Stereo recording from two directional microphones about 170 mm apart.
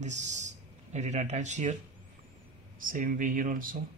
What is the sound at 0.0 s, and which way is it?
Speech, 45° right (ahead or behind).